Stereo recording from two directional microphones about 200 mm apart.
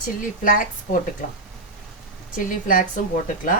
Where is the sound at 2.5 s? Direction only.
40° left (ahead or behind).